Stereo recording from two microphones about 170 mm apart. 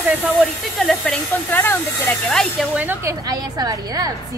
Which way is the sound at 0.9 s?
5° left (ahead or behind).